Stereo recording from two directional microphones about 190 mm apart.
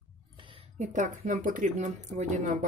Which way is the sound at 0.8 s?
40° right (ahead or behind).